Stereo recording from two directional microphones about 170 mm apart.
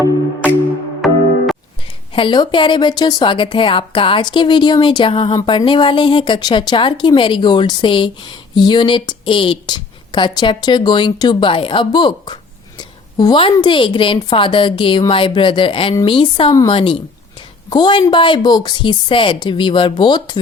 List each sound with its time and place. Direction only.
1.0 s music: centre (ahead or behind)
2.1 s speech: 30° left (ahead or behind)